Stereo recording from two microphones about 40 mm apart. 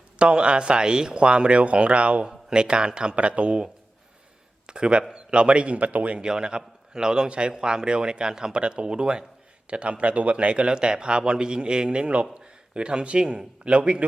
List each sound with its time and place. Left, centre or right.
0.2 s a man's voice: right
2.2 s a man's voice: centre; by 6.1 s right
6.1 s a man's voice: right
8.6 s a man's voice: right
13.7 s a man's voice: right